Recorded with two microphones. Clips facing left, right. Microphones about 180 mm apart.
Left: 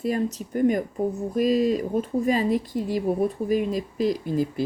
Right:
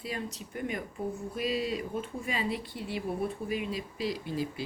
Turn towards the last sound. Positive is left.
turn(degrees=45)  # may be behind; listen again after turning